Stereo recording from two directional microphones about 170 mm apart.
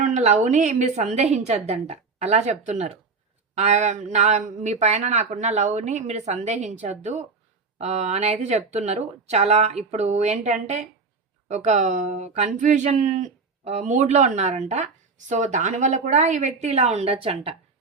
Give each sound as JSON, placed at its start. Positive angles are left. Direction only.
{"t": 0.0, "sound": "a woman's voice", "side_deg": -45}